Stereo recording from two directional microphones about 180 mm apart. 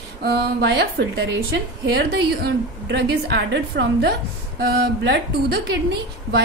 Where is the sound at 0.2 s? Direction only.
65° right (ahead or behind).